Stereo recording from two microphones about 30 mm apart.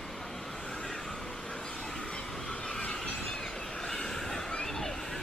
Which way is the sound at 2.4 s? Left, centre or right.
Left.